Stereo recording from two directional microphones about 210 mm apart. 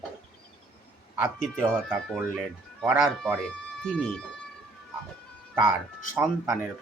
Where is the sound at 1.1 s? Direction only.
5° right (ahead or behind).